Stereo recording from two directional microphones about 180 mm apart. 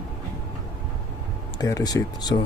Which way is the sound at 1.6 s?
20° left (ahead or behind).